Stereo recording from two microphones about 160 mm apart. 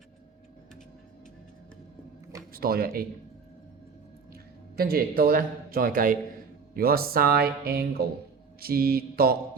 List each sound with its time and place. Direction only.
2.5 s speech: 65° right (ahead or behind)
4.8 s a man's voice: 70° right (ahead or behind)